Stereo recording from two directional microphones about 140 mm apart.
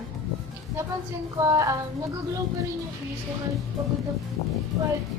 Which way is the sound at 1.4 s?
20° right (ahead or behind).